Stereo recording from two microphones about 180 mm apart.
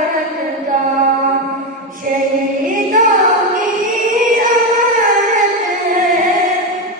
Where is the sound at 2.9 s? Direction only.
45° right (ahead or behind).